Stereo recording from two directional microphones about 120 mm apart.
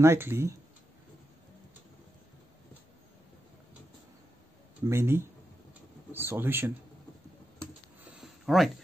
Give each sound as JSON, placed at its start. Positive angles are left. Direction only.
{"t": 0.0, "sound": "speech", "side_deg": -20}
{"t": 4.8, "sound": "speech", "side_deg": -20}
{"t": 8.2, "sound": "a sound", "side_deg": 0}